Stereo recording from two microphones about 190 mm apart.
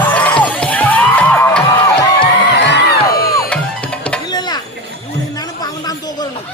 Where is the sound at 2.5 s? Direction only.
65° left (ahead or behind).